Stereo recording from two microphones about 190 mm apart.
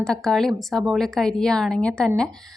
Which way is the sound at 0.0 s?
5° left (ahead or behind).